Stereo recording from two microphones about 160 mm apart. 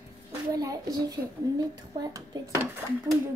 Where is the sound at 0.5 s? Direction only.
20° right (ahead or behind).